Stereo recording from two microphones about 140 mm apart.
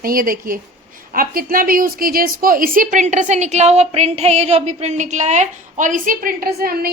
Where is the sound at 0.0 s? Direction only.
90° right.